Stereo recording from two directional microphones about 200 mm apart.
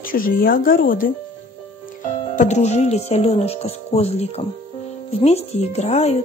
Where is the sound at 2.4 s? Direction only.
35° left (ahead or behind).